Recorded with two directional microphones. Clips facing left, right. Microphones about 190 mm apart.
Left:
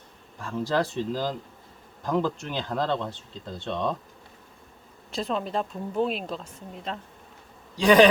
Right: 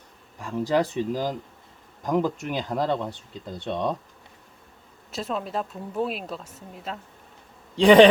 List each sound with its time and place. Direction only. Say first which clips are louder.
0.3 s speech: right 3 dB; 15° right (ahead or behind)
5.1 s a woman's voice: left 1 dB; centre (ahead or behind)
7.8 s a man's voice: right 4 dB; 30° right (ahead or behind)